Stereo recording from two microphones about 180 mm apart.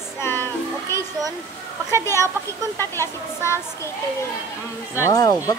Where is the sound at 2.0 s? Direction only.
15° left (ahead or behind).